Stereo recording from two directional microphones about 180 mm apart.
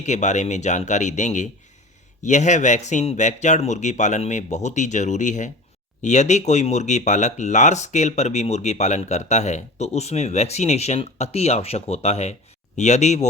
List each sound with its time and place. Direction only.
0.0 s speech: 40° left (ahead or behind)